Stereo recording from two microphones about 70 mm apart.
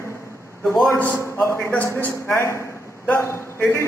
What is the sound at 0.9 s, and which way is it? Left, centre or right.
Speech, left.